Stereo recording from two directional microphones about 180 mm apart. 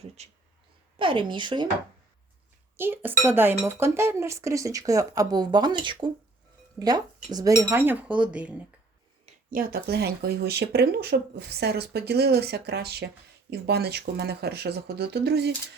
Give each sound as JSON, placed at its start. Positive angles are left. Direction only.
{"t": 0.2, "sound": "speech", "side_deg": -40}
{"t": 2.7, "sound": "cutlery", "side_deg": -10}
{"t": 3.6, "sound": "speech", "side_deg": -15}
{"t": 6.7, "sound": "cutlery", "side_deg": -20}
{"t": 9.5, "sound": "speech", "side_deg": -55}